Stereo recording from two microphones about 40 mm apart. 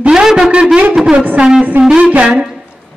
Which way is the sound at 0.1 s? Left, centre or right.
Centre.